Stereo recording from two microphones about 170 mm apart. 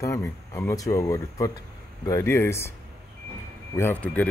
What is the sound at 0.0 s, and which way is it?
Speech, 20° left (ahead or behind).